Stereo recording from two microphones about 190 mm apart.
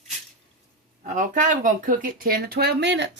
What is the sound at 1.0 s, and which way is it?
Speech, 40° right (ahead or behind).